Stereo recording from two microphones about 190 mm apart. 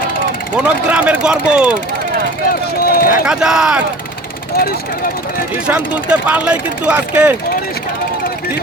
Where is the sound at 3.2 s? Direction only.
5° right (ahead or behind).